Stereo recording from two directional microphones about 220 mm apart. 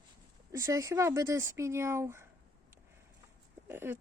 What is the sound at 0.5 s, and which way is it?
Speech, 15° right (ahead or behind).